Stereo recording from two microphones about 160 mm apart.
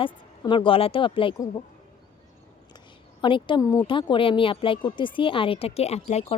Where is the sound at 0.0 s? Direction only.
30° left (ahead or behind).